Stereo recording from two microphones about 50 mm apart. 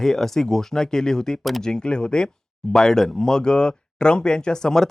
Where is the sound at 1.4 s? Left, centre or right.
Centre.